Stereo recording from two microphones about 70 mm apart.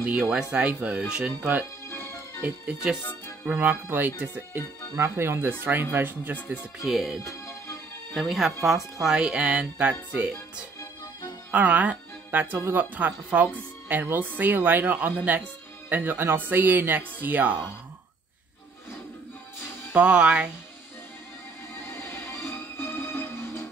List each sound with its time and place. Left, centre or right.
0.3 s speech: centre
2.6 s speech: centre
3.9 s speech: right
4.9 s speech: right
6.8 s speech: centre
8.2 s speech: centre; by 10.3 s right
11.5 s speech: right
19.9 s speech: centre
21.8 s music: left